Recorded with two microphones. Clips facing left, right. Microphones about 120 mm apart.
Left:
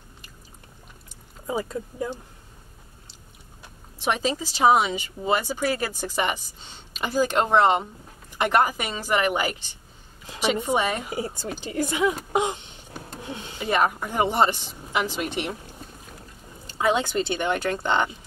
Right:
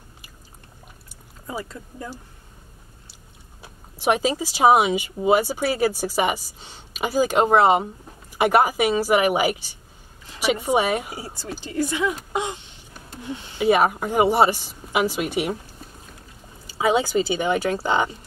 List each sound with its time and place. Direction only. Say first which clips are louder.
1.5 s speech: left 4 dB; 15° left (ahead or behind)
3.6 s speech: right 5 dB; 10° right (ahead or behind)
11.6 s speech: even; 15° left (ahead or behind)
12.3 s a sound: left 3 dB; 15° left (ahead or behind)
13.3 s speech: right 3 dB; 15° left (ahead or behind)
13.6 s speech: right 5 dB; 10° right (ahead or behind)
16.6 s speech: right 3 dB; 5° right (ahead or behind)